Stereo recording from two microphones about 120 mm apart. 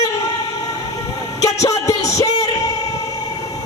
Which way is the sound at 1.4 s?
30° left (ahead or behind).